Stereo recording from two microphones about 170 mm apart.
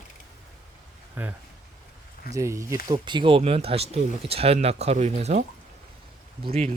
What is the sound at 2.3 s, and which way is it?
Speech, 20° right (ahead or behind).